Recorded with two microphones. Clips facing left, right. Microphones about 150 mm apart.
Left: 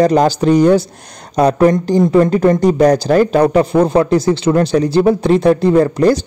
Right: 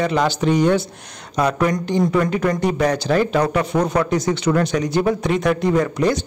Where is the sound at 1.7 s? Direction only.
45° left (ahead or behind).